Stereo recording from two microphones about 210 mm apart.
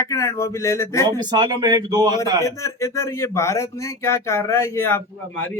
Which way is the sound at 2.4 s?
15° left (ahead or behind).